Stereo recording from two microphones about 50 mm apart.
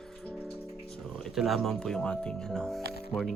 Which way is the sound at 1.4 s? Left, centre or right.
Centre.